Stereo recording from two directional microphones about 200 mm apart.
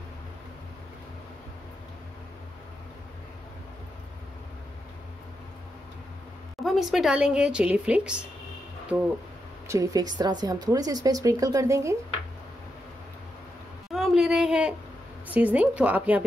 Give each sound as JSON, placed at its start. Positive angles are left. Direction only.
{"t": 6.6, "sound": "speech", "side_deg": 0}
{"t": 9.7, "sound": "speech", "side_deg": -15}
{"t": 13.9, "sound": "a sound", "side_deg": -5}
{"t": 15.2, "sound": "speech", "side_deg": -10}